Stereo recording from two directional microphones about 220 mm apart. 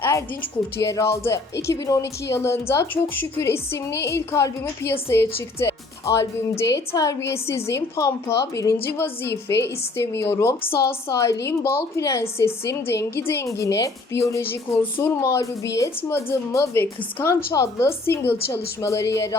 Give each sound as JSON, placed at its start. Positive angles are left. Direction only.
{"t": 0.0, "sound": "music", "side_deg": 15}
{"t": 0.8, "sound": "a woman's voice", "side_deg": 15}
{"t": 9.3, "sound": "a woman's voice", "side_deg": 50}
{"t": 10.0, "sound": "a woman's voice", "side_deg": 10}